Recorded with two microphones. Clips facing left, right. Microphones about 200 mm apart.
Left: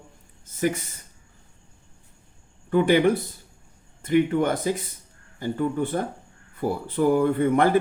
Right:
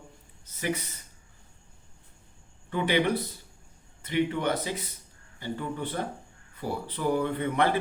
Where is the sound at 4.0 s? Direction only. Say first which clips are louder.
Left 7 dB; 50° left (ahead or behind).